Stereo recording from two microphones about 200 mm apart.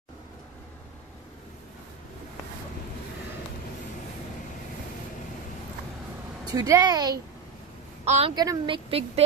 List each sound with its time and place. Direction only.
6.5 s a woman's voice: 20° right (ahead or behind)
8.0 s a woman's voice: 30° right (ahead or behind)
8.4 s a woman's voice: 20° right (ahead or behind)